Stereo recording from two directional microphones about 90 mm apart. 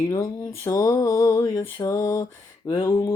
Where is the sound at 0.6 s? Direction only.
35° left (ahead or behind).